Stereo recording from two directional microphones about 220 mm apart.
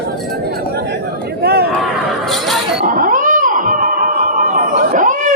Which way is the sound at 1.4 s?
45° right (ahead or behind).